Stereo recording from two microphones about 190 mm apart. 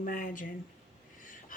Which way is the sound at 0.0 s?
45° left (ahead or behind).